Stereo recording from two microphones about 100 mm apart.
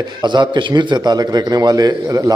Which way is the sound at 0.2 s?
50° right (ahead or behind).